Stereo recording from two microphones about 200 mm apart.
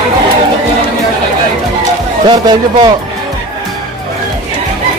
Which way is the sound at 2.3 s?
20° right (ahead or behind).